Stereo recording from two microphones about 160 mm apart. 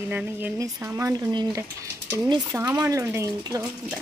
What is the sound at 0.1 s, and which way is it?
A woman's voice, 15° right (ahead or behind).